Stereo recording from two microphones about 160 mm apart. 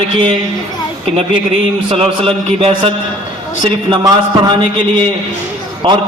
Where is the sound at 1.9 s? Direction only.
35° right (ahead or behind).